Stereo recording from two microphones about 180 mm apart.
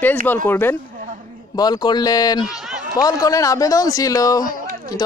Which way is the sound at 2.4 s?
5° right (ahead or behind).